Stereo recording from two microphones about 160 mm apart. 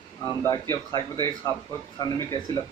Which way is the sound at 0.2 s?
20° left (ahead or behind).